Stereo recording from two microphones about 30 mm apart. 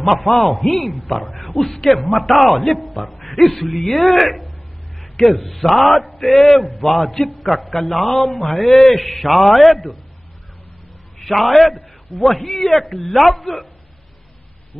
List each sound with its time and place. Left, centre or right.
0.0 s a man's voice: centre
1.6 s speech: centre
1.9 s a man's voice: centre
11.2 s a man's voice: centre